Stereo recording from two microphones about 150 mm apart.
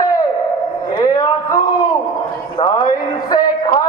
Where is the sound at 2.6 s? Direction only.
30° left (ahead or behind).